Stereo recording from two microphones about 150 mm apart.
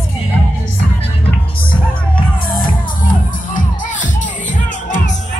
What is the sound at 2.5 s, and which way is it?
Music, 70° left (ahead or behind).